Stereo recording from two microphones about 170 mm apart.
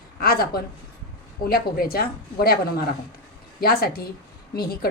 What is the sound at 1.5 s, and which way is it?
A woman's voice, 65° left (ahead or behind).